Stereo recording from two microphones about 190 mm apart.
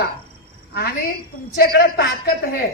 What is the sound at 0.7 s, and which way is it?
A woman's voice, 55° left (ahead or behind).